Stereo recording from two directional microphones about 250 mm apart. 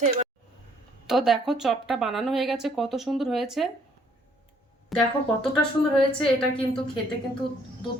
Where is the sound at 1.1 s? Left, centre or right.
Centre.